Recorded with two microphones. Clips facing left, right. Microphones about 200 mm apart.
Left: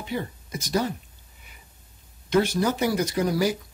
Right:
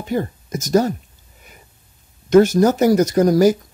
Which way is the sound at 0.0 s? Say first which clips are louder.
Right 8 dB; 45° right (ahead or behind).